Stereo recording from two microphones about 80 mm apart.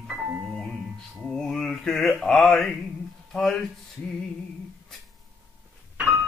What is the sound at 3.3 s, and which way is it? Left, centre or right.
Speech, centre.